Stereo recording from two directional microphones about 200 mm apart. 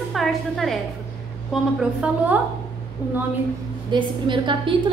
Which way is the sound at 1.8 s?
5° right (ahead or behind).